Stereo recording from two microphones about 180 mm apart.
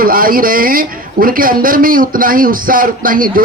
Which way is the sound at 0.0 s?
50° right (ahead or behind).